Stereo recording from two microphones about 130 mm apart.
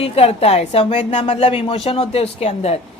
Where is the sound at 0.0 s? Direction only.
50° left (ahead or behind).